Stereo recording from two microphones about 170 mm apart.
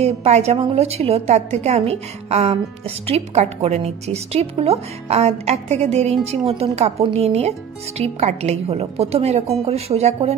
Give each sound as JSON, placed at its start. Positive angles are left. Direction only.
{"t": 0.0, "sound": "a woman's voice", "side_deg": -40}